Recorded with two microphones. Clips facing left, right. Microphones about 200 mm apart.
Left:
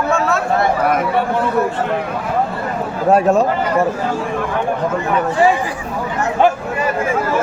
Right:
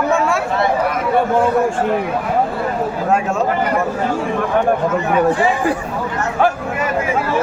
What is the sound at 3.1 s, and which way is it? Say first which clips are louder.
Speech: left 7 dB; 35° left (ahead or behind).